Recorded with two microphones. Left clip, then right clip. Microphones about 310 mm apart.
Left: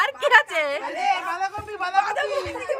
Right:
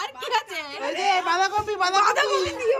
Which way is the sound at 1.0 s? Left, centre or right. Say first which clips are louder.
Right 3 dB; right.